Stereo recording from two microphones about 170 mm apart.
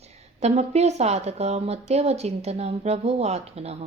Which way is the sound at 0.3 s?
40° right (ahead or behind).